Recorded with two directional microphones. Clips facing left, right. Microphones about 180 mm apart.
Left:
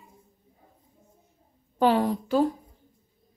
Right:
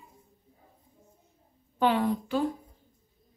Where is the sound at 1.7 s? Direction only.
40° left (ahead or behind).